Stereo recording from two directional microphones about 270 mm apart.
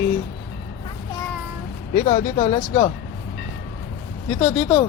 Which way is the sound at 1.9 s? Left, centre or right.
Left.